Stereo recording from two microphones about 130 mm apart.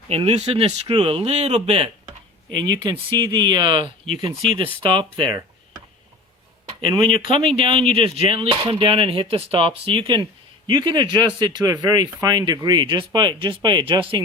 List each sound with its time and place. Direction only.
0.1 s speech: 50° right (ahead or behind)
2.6 s speech: 35° right (ahead or behind)
6.7 s a sound: 30° right (ahead or behind)
7.1 s speech: 45° right (ahead or behind)